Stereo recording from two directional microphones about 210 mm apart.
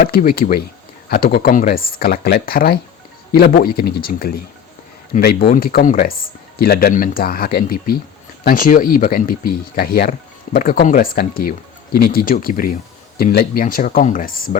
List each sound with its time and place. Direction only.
0.0 s speech: 45° left (ahead or behind)